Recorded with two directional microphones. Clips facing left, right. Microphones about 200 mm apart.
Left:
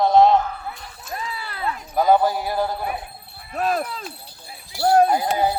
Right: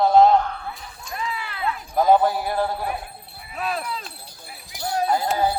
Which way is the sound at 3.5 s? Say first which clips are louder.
Left 5 dB; 45° left (ahead or behind).